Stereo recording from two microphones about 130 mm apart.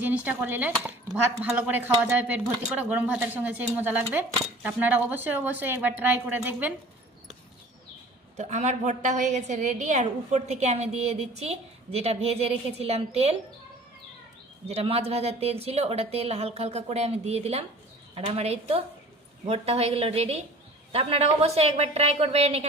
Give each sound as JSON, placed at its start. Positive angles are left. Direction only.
{"t": 0.0, "sound": "a woman's voice", "side_deg": -10}
{"t": 8.4, "sound": "a woman's voice", "side_deg": -60}
{"t": 14.7, "sound": "a woman's voice", "side_deg": -50}